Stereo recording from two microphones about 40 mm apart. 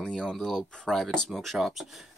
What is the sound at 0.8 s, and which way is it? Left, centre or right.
Speech, centre.